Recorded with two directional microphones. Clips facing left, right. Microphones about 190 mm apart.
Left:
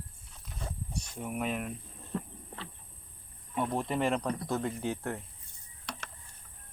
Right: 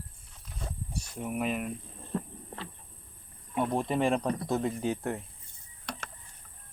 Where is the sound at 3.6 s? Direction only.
15° right (ahead or behind).